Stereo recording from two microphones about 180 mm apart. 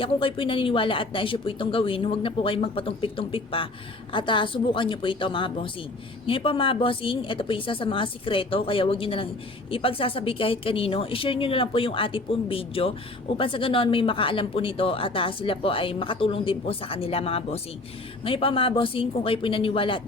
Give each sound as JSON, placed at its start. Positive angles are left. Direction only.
{"t": 0.0, "sound": "a woman's voice", "side_deg": 30}